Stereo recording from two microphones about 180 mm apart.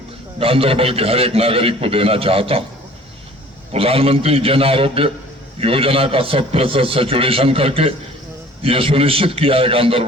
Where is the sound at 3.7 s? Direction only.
30° right (ahead or behind).